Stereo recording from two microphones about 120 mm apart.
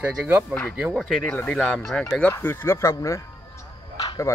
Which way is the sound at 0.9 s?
Centre (ahead or behind).